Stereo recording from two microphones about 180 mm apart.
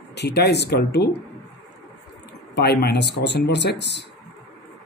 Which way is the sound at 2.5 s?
70° left (ahead or behind).